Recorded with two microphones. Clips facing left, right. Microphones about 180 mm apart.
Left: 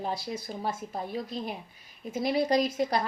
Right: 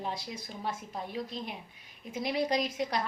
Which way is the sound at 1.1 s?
40° left (ahead or behind).